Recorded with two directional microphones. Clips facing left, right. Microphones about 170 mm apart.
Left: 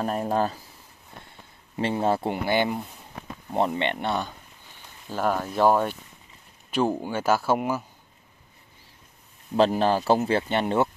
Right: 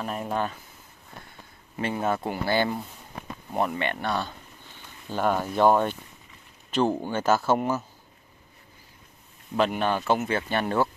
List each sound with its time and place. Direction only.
0.0 s speech: 40° left (ahead or behind)
1.8 s speech: 30° left (ahead or behind)
5.1 s speech: centre (ahead or behind)
9.6 s speech: 35° left (ahead or behind)